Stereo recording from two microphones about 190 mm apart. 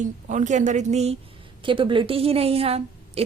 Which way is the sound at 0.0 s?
40° right (ahead or behind).